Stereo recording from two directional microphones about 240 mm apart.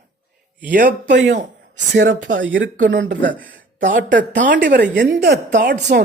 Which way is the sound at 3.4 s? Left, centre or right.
Right.